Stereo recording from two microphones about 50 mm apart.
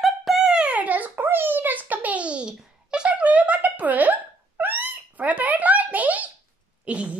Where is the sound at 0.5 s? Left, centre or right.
Right.